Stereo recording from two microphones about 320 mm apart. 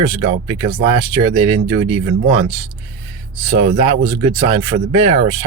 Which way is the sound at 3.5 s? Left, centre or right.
Centre.